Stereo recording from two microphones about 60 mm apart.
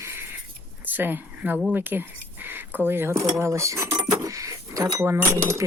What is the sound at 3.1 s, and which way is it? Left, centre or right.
Cutlery, right.